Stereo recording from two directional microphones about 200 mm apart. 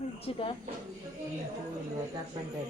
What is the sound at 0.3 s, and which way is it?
Speech, 30° left (ahead or behind).